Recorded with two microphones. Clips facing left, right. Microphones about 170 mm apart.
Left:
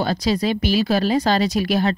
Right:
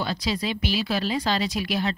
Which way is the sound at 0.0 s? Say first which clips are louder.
Left 7 dB; 45° left (ahead or behind).